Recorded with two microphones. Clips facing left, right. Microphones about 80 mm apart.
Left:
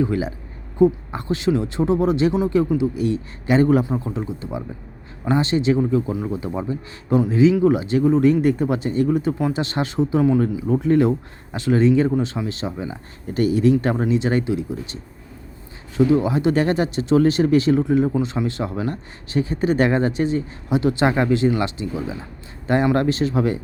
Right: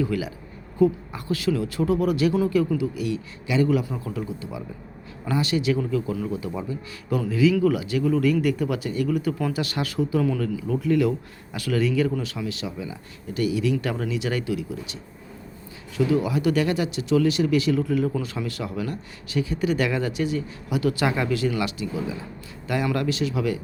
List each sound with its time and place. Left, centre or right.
0.0 s a man's voice: left
3.8 s a man's voice: left
16.0 s speech: left